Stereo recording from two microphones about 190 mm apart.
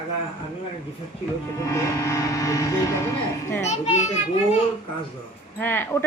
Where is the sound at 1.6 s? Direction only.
15° left (ahead or behind).